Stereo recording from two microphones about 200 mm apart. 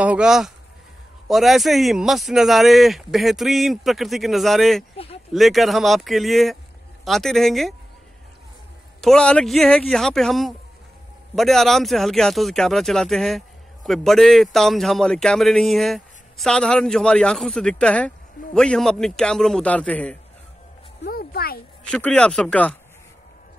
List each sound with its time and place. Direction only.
0.0 s a man's voice: 5° right (ahead or behind)
4.9 s a sound: 30° left (ahead or behind)
5.3 s a man's voice: centre (ahead or behind)
9.0 s a man's voice: 5° left (ahead or behind)
21.0 s speech: 50° left (ahead or behind)
21.8 s a man's voice: 5° left (ahead or behind)